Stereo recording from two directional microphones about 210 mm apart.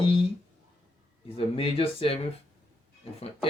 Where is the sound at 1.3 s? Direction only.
25° left (ahead or behind).